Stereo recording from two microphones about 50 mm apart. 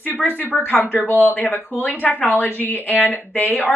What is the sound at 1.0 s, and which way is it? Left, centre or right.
Speech, left.